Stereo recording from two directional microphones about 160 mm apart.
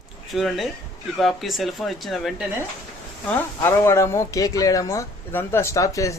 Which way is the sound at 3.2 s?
15° left (ahead or behind).